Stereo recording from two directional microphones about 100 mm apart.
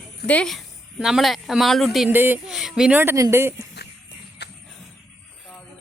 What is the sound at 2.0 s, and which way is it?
Speech, 20° right (ahead or behind).